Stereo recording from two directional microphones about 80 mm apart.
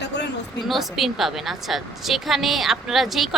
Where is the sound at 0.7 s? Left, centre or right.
Centre.